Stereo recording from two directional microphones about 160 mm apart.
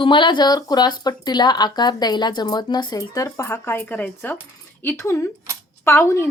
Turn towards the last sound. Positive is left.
turn(degrees=15)  # may be behind; listen again after turning